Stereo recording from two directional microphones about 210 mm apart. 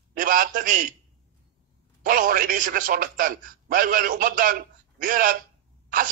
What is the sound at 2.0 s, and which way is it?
Speech, 40° right (ahead or behind).